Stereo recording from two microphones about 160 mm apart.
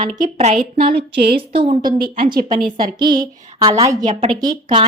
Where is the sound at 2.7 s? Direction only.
25° right (ahead or behind).